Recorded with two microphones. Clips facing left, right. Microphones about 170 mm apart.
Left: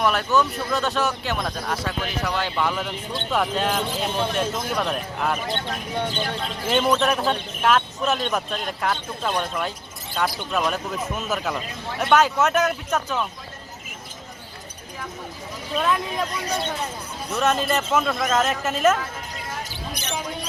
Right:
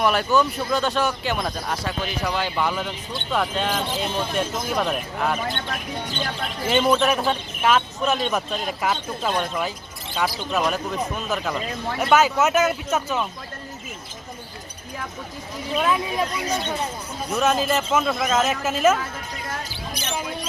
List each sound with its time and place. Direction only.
0.0 s speech: centre (ahead or behind)
6.7 s speech: centre (ahead or behind)
15.8 s speech: 5° right (ahead or behind)